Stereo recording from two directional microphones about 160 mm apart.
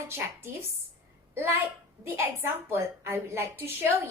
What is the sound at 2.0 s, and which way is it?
A woman's voice, 15° right (ahead or behind).